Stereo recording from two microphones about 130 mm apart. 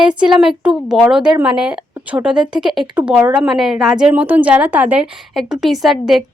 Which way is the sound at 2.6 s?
5° right (ahead or behind).